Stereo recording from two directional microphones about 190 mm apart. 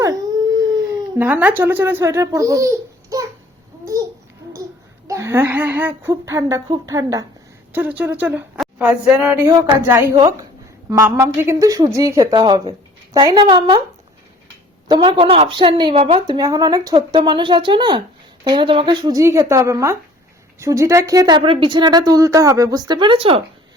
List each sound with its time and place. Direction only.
0.0 s dog: 20° right (ahead or behind)
1.2 s a woman's voice: 10° right (ahead or behind)
5.0 s a woman's voice: 15° right (ahead or behind)
14.8 s speech: 25° right (ahead or behind)